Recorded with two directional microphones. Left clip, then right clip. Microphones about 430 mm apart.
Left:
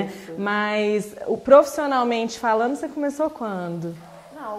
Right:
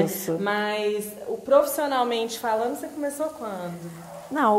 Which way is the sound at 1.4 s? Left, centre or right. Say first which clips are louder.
Left 5 dB; left.